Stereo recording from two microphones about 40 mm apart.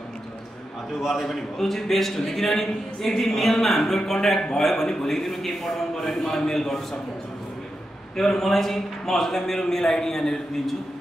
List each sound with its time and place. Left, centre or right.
1.0 s a man's voice: centre
8.2 s a man's voice: centre